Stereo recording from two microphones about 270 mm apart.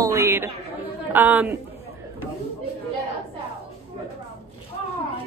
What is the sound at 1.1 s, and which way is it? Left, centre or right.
Speech, centre.